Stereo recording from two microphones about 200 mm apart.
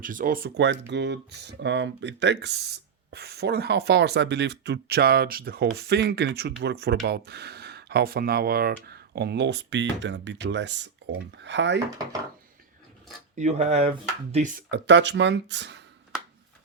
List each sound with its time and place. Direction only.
0.0 s speech: 45° right (ahead or behind); by 11.8 s 60° right (ahead or behind)
13.3 s speech: 35° right (ahead or behind)
14.7 s speech: 60° right (ahead or behind)